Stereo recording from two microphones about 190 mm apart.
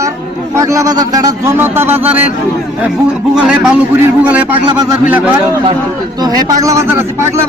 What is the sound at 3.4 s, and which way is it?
Speech, 5° right (ahead or behind).